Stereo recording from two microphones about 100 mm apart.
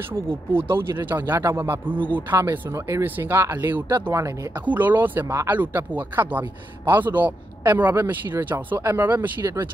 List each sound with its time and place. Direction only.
0.5 s speech: 20° right (ahead or behind)